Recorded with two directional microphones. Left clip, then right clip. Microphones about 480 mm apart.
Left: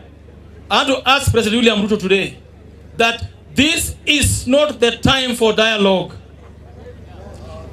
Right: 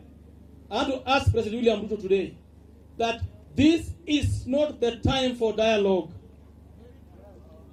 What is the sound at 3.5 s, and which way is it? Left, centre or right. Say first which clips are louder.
Speech: left 6 dB; centre.